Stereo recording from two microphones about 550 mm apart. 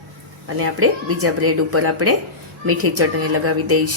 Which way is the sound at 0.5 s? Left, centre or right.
Right.